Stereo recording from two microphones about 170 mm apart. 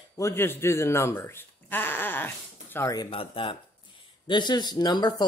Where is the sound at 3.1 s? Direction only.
35° left (ahead or behind).